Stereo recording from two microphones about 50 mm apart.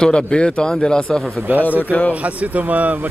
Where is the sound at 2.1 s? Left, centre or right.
Right.